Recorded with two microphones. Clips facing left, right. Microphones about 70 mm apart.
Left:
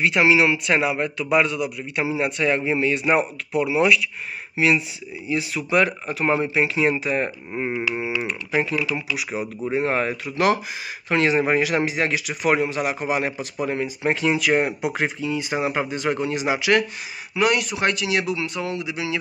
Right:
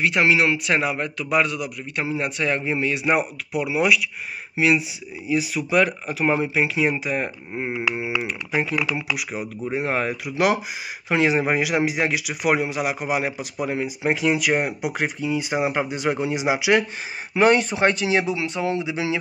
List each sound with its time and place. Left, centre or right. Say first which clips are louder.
0.0 s a man's voice: left 1 dB; centre
17.3 s speech: right 4 dB; right